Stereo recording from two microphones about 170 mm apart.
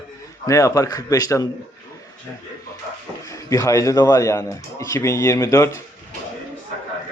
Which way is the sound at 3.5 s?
20° left (ahead or behind).